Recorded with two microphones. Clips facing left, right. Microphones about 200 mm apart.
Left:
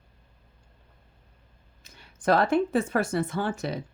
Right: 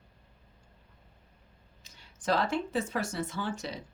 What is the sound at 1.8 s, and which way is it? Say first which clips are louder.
Speech: left 8 dB; 55° left (ahead or behind).